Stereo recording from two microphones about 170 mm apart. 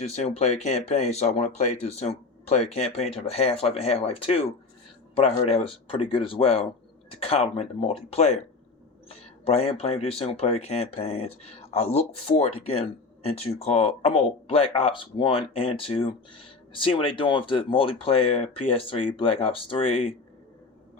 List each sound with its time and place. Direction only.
0.0 s speech: 40° left (ahead or behind)